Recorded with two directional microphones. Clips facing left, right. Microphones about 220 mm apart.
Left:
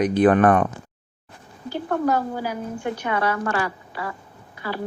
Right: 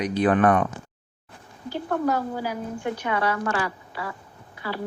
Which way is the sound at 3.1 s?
50° left (ahead or behind).